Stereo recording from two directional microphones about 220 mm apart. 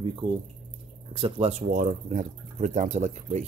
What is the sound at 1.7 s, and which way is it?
Speech, 35° right (ahead or behind).